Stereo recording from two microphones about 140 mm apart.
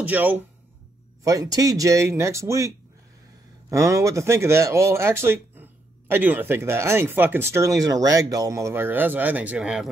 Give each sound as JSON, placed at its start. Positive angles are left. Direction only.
{"t": 0.0, "sound": "speech", "side_deg": -10}
{"t": 1.2, "sound": "speech", "side_deg": -25}
{"t": 3.7, "sound": "speech", "side_deg": -20}